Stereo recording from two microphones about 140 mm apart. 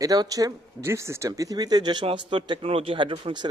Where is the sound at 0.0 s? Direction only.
25° right (ahead or behind).